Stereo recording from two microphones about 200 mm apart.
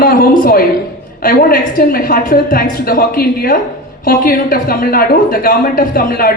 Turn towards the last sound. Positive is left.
turn(degrees=45)  # may be behind; listen again after turning